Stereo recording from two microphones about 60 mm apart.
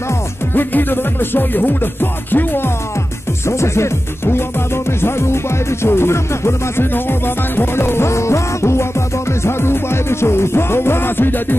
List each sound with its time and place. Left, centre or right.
0.6 s music: left
3.4 s music: left